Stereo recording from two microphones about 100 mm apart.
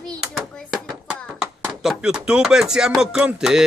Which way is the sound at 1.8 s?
5° right (ahead or behind).